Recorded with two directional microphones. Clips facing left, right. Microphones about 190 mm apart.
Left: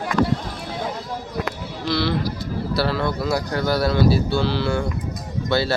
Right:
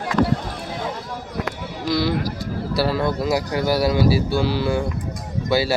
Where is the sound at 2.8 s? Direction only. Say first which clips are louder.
Right 4 dB; 15° right (ahead or behind).